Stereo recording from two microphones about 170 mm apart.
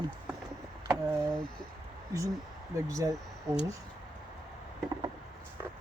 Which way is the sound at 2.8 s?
20° right (ahead or behind).